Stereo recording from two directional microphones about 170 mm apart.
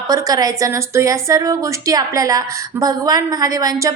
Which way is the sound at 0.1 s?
20° right (ahead or behind).